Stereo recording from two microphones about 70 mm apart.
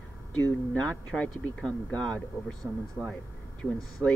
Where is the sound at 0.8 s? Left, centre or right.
Centre.